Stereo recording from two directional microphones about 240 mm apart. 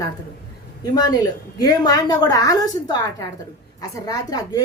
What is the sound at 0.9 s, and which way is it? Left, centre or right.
A woman's voice, centre.